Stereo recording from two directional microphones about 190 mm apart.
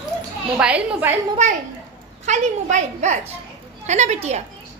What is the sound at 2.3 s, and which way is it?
A woman's voice, 40° right (ahead or behind).